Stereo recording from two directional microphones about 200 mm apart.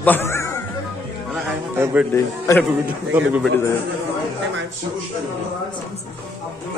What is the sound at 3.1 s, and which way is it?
Speech, 5° right (ahead or behind).